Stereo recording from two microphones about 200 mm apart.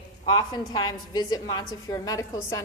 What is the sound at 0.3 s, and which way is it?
A woman's voice, 20° left (ahead or behind).